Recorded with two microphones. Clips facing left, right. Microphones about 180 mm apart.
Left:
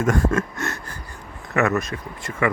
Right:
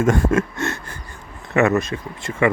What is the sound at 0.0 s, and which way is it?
Speech, 25° right (ahead or behind).